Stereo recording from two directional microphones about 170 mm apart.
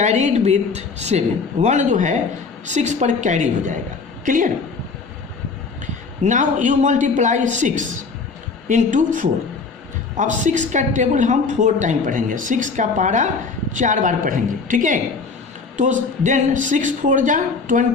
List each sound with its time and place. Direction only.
0.0 s a woman's voice: 45° right (ahead or behind)
5.8 s a man's voice: 45° right (ahead or behind)